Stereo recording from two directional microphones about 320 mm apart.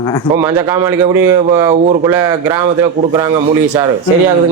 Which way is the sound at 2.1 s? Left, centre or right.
Centre.